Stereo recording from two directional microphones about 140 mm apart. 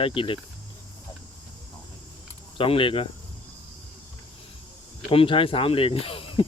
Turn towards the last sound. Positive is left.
turn(degrees=40)  # may be behind; listen again after turning